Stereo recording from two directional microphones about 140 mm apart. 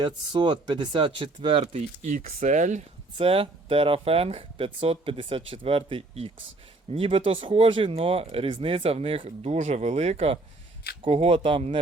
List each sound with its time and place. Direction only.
0.0 s speech: 35° right (ahead or behind)
1.7 s speech: 60° right (ahead or behind)
3.2 s speech: 40° right (ahead or behind)